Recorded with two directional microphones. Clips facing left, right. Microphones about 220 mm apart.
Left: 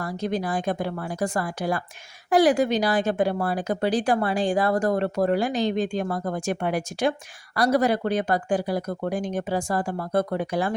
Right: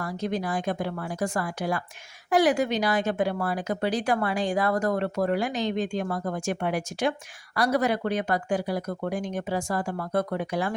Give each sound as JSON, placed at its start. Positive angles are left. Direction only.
{"t": 0.0, "sound": "speech", "side_deg": 35}